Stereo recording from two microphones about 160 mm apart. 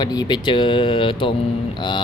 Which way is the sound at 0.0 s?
25° left (ahead or behind).